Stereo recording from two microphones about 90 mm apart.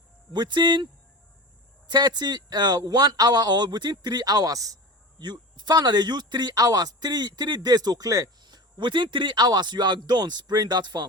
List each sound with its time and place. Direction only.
0.3 s speech: 55° right (ahead or behind)
1.9 s speech: 50° right (ahead or behind)
5.2 s speech: 55° right (ahead or behind)